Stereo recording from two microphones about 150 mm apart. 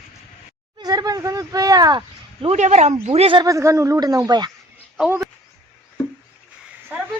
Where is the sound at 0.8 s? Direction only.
25° right (ahead or behind).